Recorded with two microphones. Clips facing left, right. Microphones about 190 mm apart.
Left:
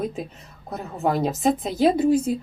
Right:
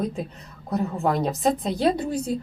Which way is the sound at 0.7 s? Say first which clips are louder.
Right 1 dB; centre (ahead or behind).